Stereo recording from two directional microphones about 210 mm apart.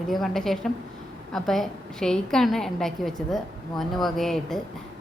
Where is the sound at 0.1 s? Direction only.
Centre (ahead or behind).